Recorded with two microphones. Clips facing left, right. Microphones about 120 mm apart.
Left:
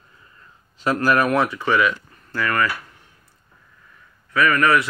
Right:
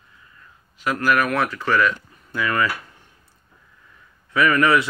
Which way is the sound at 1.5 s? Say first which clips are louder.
Left 1 dB; 5° left (ahead or behind).